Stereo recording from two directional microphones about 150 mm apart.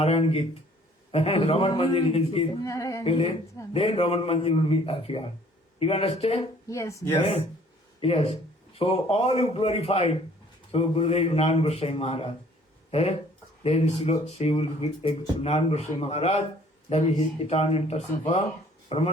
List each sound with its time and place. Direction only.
0.0 s a man's voice: 45° left (ahead or behind)
2.6 s speech: 20° left (ahead or behind)
3.0 s a man's voice: 40° left (ahead or behind)
6.7 s speech: 20° left (ahead or behind)
8.0 s speech: 45° left (ahead or behind)